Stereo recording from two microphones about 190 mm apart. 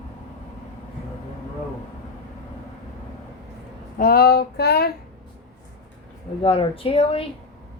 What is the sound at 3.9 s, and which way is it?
Speech, 50° left (ahead or behind).